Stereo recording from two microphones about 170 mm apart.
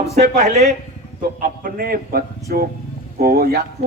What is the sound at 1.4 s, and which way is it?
A man's voice, 60° right (ahead or behind).